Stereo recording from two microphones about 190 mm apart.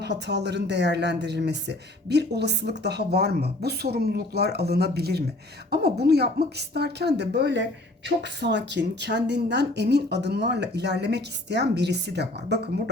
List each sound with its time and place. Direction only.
0.0 s a woman's voice: 60° right (ahead or behind)